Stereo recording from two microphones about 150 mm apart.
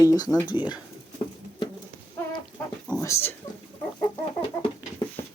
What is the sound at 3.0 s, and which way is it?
Speech, 15° left (ahead or behind).